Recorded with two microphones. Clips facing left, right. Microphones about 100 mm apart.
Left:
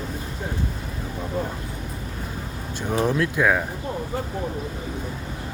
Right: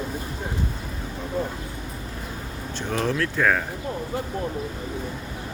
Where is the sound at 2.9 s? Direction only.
15° left (ahead or behind).